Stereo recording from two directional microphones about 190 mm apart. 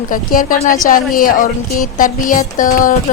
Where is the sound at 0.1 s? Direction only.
45° left (ahead or behind).